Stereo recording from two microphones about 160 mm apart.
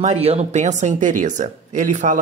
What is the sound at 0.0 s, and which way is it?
Speech, 45° right (ahead or behind).